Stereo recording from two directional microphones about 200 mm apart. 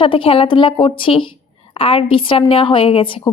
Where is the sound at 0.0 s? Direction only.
25° left (ahead or behind).